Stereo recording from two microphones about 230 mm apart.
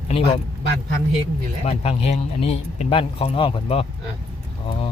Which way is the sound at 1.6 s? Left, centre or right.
Left.